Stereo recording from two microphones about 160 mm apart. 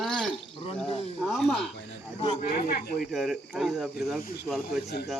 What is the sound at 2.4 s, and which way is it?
Speech, 65° left (ahead or behind).